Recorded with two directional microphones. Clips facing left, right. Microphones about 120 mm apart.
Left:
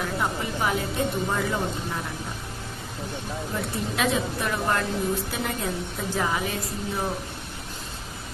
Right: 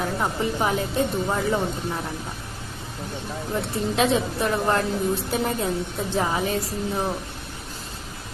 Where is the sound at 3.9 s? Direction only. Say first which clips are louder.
Right 4 dB; 30° right (ahead or behind).